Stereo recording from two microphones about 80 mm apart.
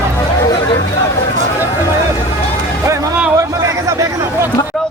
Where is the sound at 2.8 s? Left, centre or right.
Right.